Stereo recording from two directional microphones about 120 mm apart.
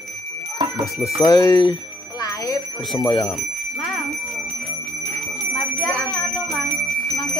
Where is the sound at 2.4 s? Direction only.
35° left (ahead or behind).